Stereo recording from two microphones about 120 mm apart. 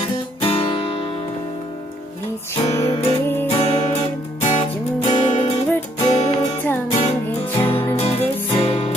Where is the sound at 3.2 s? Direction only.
20° left (ahead or behind).